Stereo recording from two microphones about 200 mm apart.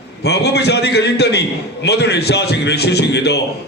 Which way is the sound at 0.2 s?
55° left (ahead or behind).